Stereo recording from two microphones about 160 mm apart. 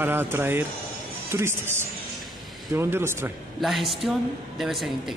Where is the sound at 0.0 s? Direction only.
15° right (ahead or behind).